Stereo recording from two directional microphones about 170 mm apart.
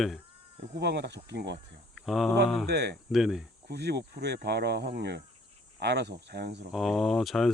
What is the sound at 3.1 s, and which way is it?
Speech, centre (ahead or behind).